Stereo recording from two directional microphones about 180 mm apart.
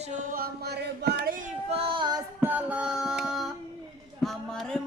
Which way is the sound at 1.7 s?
30° right (ahead or behind).